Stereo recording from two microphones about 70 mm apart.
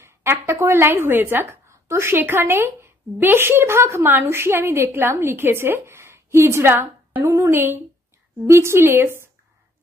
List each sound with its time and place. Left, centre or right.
0.0 s a woman's voice: right